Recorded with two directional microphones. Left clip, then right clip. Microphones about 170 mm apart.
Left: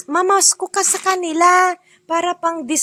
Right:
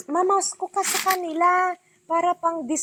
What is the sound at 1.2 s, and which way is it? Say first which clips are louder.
Speech: left 9 dB; 50° left (ahead or behind).